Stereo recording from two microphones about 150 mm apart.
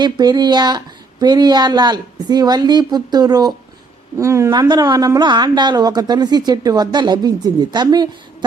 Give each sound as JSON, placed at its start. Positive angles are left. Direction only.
{"t": 0.0, "sound": "a woman's voice", "side_deg": -25}